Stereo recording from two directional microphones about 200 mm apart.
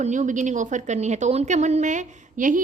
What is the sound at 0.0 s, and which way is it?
A woman's voice, 40° right (ahead or behind).